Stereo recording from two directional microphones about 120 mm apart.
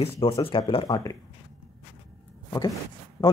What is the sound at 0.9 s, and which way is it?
Speech, 30° left (ahead or behind).